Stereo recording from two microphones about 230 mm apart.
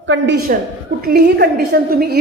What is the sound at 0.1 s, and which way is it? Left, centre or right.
A woman's voice, right.